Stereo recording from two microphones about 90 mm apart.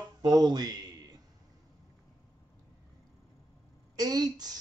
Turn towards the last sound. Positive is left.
turn(degrees=-45)  # may be behind; listen again after turning